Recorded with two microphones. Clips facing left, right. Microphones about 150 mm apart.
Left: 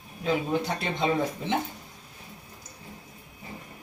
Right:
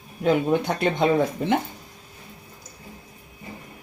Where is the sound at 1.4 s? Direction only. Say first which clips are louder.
Right 7 dB; 60° right (ahead or behind).